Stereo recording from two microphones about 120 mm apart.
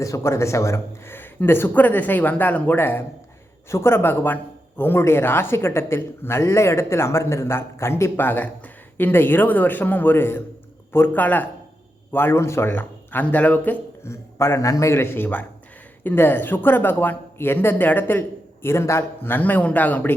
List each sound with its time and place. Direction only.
0.0 s speech: 25° left (ahead or behind)